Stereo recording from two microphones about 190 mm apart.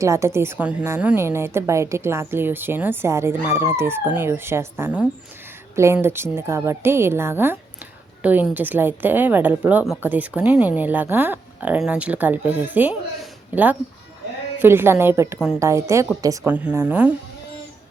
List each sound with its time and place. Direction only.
0.0 s a woman's voice: 15° right (ahead or behind)